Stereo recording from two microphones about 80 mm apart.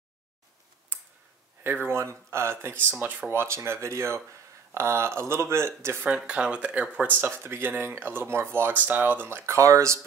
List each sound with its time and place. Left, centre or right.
1.6 s speech: right
6.0 s speech: centre; by 9.9 s right